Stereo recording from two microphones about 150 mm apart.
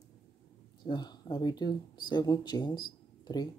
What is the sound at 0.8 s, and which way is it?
Speech, 30° left (ahead or behind).